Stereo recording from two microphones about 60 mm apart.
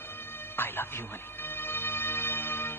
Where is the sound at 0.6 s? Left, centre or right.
Left.